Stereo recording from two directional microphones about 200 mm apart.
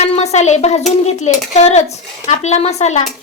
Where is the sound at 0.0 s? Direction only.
30° left (ahead or behind).